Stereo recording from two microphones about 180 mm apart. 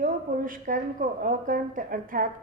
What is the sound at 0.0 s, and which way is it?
A woman's voice, 50° right (ahead or behind).